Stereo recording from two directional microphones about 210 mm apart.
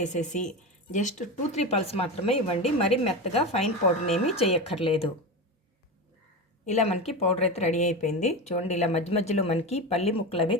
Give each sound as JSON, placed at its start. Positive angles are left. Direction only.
{"t": 0.0, "sound": "speech", "side_deg": 35}
{"t": 6.7, "sound": "speech", "side_deg": 30}